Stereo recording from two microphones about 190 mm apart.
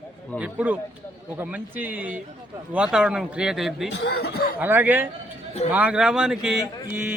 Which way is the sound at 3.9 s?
60° left (ahead or behind).